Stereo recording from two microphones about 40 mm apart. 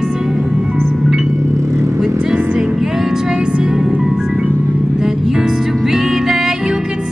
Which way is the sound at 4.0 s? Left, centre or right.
Centre.